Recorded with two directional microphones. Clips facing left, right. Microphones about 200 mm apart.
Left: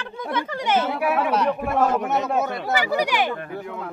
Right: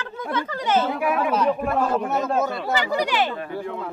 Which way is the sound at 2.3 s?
15° left (ahead or behind).